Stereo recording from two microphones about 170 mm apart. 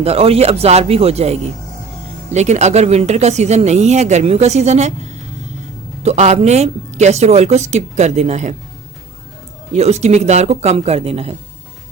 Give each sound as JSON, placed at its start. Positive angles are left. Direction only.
{"t": 0.0, "sound": "speech", "side_deg": -35}
{"t": 9.7, "sound": "speech", "side_deg": -40}